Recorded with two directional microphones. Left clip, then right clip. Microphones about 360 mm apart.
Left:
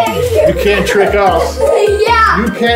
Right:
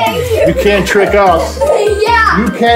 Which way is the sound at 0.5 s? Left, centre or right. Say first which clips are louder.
Right 1 dB; centre.